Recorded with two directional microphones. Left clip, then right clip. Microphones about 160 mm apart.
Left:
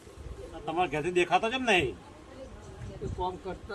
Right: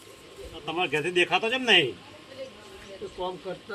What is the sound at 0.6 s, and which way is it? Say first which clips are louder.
A man's voice: right 2 dB; 15° left (ahead or behind).